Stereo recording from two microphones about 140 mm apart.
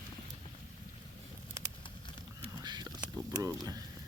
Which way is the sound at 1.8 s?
30° left (ahead or behind).